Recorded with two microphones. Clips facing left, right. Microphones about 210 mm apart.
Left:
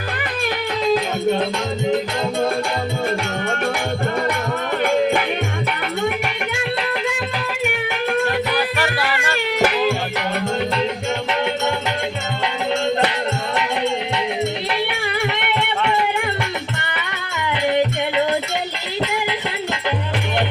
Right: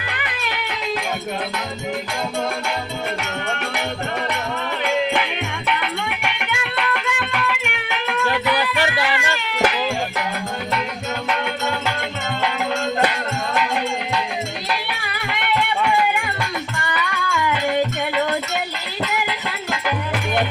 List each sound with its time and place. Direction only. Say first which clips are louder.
4.8 s music: left 3 dB; 50° left (ahead or behind)
5.6 s music: left 1 dB; 40° left (ahead or behind)
16.8 s music: right 4 dB; 25° left (ahead or behind)
19.1 s music: left 2 dB; 25° left (ahead or behind)